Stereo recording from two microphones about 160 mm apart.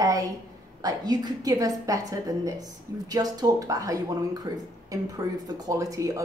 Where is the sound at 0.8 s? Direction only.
25° right (ahead or behind).